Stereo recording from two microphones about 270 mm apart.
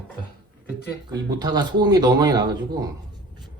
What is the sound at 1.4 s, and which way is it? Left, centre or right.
Speech, centre.